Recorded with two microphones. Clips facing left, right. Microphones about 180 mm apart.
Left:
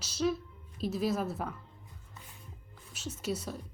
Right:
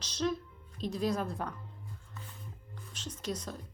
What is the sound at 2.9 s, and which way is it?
Speech, 10° left (ahead or behind).